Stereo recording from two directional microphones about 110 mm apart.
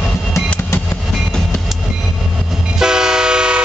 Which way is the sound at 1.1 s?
5° left (ahead or behind).